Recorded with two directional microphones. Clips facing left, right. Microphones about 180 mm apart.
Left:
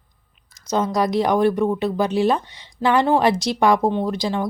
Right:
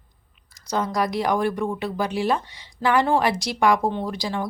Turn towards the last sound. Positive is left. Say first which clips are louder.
# left 5 dB
turn(degrees=20)  # may be behind; listen again after turning